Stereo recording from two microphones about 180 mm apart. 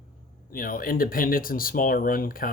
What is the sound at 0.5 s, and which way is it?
Speech, 50° left (ahead or behind).